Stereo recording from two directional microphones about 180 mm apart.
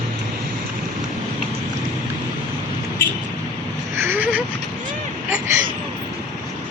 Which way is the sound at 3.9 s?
15° right (ahead or behind).